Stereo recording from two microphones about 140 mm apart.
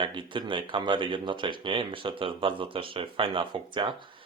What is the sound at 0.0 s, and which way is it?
Speech, 35° right (ahead or behind).